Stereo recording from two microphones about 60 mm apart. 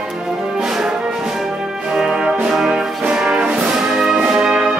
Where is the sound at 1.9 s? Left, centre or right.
Centre.